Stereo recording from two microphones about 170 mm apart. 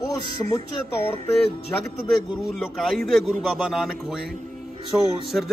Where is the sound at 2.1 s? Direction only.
Centre (ahead or behind).